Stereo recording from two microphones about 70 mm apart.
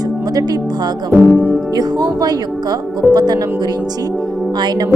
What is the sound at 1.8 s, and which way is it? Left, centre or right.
Speech, right.